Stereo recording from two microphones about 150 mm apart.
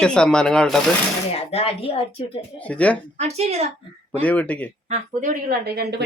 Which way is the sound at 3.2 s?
45° right (ahead or behind).